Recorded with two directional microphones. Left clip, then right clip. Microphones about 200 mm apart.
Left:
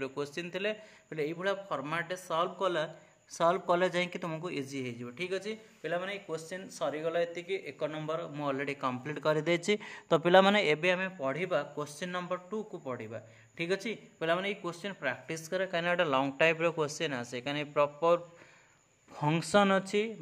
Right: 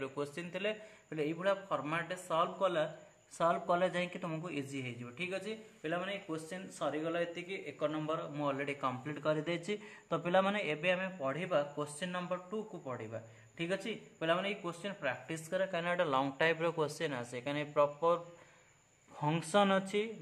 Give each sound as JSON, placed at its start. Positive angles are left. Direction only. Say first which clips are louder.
{"t": 0.0, "sound": "a man's voice", "louder": "left 3 dB", "side_deg": 35}